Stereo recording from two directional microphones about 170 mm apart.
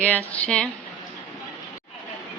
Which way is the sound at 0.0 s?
5° left (ahead or behind).